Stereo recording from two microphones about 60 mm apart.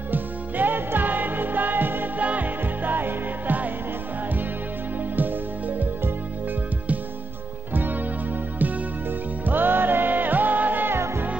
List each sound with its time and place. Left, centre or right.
0.1 s music: right
7.7 s music: right
9.5 s music: right